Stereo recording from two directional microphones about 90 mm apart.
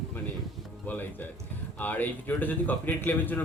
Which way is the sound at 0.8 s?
20° left (ahead or behind).